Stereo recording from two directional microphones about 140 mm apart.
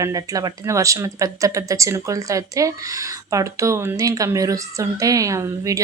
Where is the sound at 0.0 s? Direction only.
25° right (ahead or behind).